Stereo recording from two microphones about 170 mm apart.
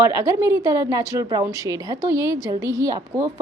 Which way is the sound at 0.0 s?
15° right (ahead or behind).